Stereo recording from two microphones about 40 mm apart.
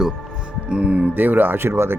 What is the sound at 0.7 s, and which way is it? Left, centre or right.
Speech, right.